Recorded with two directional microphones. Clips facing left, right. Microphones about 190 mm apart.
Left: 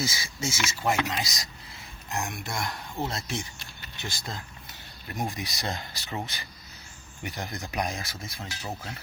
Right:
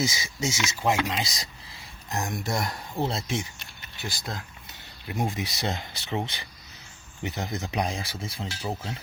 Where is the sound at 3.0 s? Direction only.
Centre (ahead or behind).